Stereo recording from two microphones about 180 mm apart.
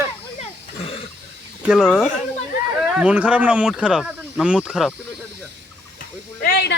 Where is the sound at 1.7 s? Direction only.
5° right (ahead or behind).